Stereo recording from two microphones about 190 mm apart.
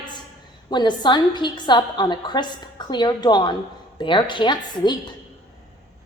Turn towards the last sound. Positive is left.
turn(degrees=25)  # may be behind; listen again after turning